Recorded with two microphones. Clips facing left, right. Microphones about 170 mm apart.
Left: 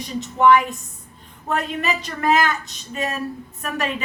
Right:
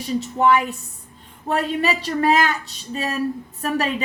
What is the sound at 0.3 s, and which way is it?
A woman's voice, 35° right (ahead or behind).